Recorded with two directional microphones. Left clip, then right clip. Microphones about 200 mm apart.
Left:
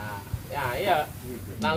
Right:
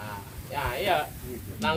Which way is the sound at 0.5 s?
25° right (ahead or behind).